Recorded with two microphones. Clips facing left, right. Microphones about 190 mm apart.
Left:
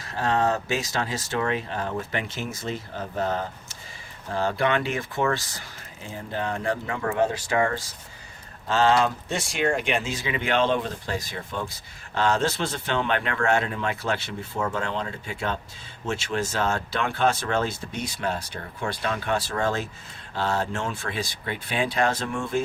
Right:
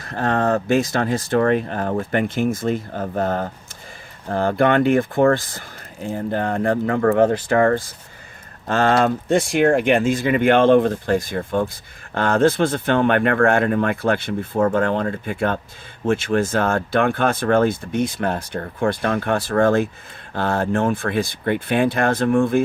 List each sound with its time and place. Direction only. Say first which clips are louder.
0.0 s speech: right 4 dB; 55° right (ahead or behind)